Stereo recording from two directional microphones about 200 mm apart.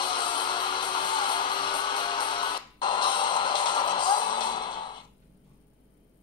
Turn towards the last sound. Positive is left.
turn(degrees=25)  # may be behind; listen again after turning